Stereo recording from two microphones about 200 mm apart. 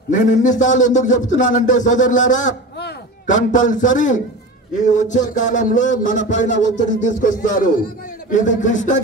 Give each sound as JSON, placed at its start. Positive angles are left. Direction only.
{"t": 0.2, "sound": "speech", "side_deg": 40}